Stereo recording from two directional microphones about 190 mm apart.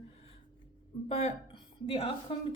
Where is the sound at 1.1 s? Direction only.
30° left (ahead or behind).